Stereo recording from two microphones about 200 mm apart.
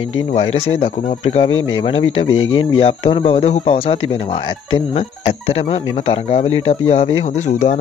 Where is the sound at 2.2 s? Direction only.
90° left.